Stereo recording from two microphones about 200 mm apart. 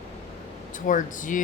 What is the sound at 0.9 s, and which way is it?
Speech, 40° left (ahead or behind).